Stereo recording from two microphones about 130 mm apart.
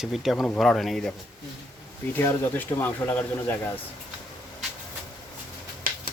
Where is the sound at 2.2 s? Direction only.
15° left (ahead or behind).